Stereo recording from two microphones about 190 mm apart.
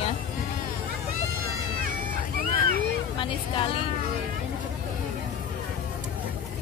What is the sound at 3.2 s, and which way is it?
Speech, 25° left (ahead or behind).